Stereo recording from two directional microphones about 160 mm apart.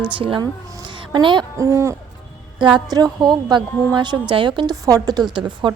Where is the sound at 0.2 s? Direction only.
35° right (ahead or behind); by 2.0 s 20° right (ahead or behind).